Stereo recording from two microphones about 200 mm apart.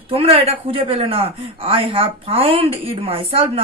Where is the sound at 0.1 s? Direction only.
30° right (ahead or behind).